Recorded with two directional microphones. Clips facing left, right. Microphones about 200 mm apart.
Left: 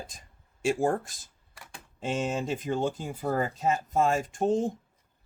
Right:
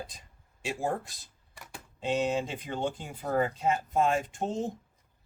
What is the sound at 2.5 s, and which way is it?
Speech, 45° left (ahead or behind).